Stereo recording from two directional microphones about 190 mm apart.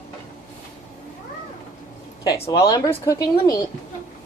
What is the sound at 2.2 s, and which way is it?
Speech, 20° left (ahead or behind).